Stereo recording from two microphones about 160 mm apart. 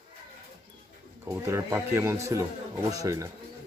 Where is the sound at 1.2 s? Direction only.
15° right (ahead or behind).